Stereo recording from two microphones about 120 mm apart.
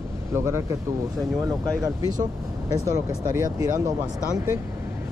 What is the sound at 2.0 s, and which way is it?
Speech, 30° right (ahead or behind).